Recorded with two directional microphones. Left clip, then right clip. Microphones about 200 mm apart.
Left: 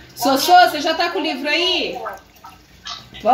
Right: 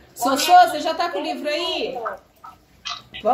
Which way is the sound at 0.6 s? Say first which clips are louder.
Left 2 dB; 5° right (ahead or behind).